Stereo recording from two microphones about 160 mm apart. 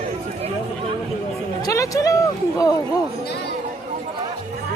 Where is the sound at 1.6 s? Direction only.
20° left (ahead or behind).